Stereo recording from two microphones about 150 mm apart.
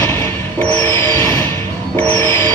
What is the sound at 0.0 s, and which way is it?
Music, 15° left (ahead or behind).